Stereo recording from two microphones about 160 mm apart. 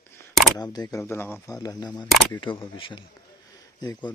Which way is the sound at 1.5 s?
25° left (ahead or behind).